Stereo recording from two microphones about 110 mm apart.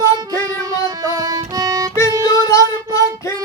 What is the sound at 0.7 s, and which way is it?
Music, 35° right (ahead or behind).